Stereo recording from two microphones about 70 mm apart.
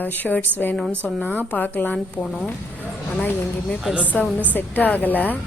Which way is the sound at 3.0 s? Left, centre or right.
Left.